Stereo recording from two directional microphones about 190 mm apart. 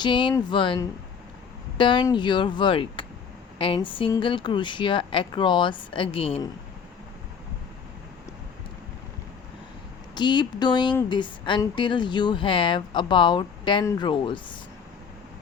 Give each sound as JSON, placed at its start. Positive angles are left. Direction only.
{"t": 0.0, "sound": "speech", "side_deg": 25}
{"t": 10.2, "sound": "speech", "side_deg": 25}